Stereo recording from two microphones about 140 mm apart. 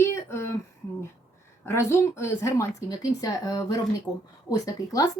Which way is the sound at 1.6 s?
20° left (ahead or behind).